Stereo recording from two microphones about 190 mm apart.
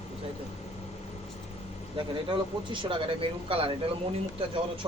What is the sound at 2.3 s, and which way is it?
Speech, 25° right (ahead or behind).